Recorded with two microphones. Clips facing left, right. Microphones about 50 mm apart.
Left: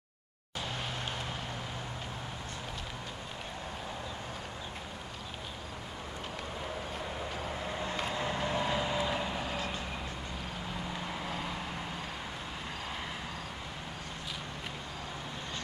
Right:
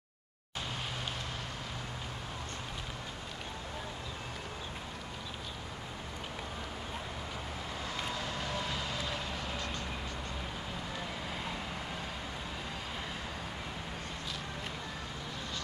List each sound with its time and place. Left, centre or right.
7.9 s vehicle: left